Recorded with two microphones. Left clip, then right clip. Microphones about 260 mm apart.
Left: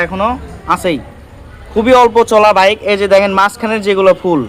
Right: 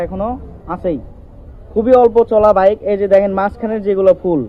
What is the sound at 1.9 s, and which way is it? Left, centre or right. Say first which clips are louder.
Speech: left 2 dB; left.